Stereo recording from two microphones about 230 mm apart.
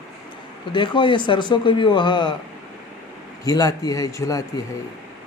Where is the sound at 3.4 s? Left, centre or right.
Centre.